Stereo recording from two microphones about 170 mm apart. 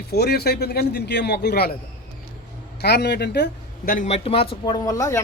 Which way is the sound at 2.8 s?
75° left (ahead or behind).